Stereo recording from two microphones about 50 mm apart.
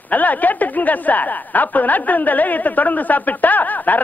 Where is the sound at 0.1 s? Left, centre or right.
Left.